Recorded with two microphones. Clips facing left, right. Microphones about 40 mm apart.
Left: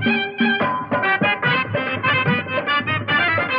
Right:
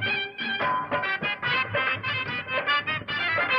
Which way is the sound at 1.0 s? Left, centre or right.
Left.